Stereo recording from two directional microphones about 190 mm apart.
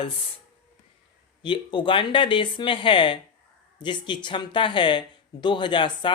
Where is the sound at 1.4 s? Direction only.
25° left (ahead or behind).